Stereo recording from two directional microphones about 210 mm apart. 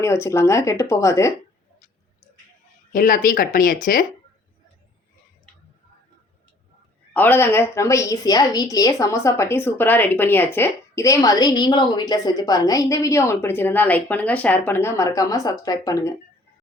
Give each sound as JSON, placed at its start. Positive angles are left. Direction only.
{"t": 0.0, "sound": "a woman's voice", "side_deg": 15}
{"t": 2.9, "sound": "speech", "side_deg": 40}
{"t": 7.1, "sound": "a woman's voice", "side_deg": 10}